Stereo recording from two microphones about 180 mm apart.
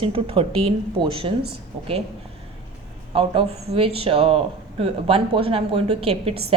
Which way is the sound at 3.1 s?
30° right (ahead or behind).